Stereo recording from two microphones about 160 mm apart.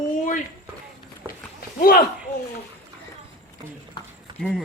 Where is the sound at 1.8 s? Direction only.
65° left (ahead or behind).